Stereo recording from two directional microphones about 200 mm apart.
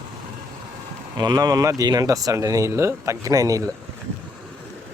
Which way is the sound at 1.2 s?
20° right (ahead or behind).